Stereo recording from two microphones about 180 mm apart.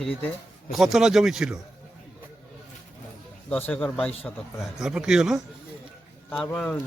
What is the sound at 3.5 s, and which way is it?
Speech, 10° left (ahead or behind).